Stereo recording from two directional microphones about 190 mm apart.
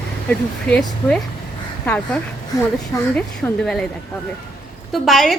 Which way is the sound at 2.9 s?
10° left (ahead or behind).